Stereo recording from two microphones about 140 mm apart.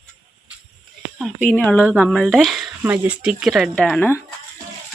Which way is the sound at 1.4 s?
10° left (ahead or behind).